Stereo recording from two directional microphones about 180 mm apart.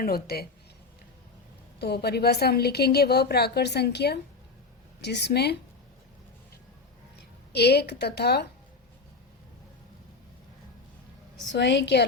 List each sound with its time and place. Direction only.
0.0 s a woman's voice: 60° left (ahead or behind)
1.8 s a woman's voice: 65° left (ahead or behind)
7.5 s a woman's voice: 65° left (ahead or behind)
11.5 s a woman's voice: 75° left (ahead or behind)